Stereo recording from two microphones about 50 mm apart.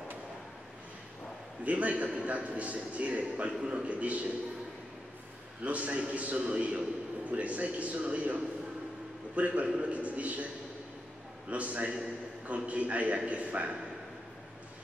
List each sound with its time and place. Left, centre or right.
1.6 s a man's voice: right
5.6 s a man's voice: right
11.5 s a man's voice: right